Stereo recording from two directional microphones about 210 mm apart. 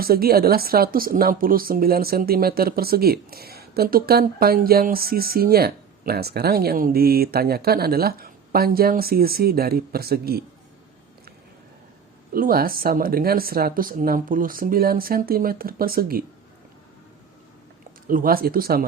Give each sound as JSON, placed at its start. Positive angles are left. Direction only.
{"t": 0.0, "sound": "a woman's voice", "side_deg": -45}
{"t": 12.3, "sound": "a woman's voice", "side_deg": -45}
{"t": 18.1, "sound": "a woman's voice", "side_deg": -45}